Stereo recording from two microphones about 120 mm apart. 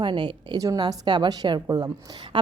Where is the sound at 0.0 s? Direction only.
40° right (ahead or behind).